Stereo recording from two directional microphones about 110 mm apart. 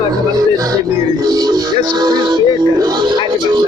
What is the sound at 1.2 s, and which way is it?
Speech, 40° right (ahead or behind).